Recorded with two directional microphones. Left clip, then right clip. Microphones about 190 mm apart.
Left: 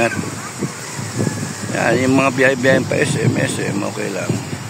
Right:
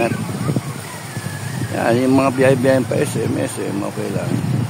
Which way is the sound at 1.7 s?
15° right (ahead or behind).